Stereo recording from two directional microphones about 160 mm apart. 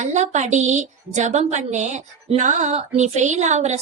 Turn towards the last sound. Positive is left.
turn(degrees=-45)  # may be behind; listen again after turning